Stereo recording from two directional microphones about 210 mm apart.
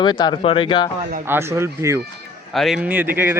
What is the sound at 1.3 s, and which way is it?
Speech, 10° right (ahead or behind).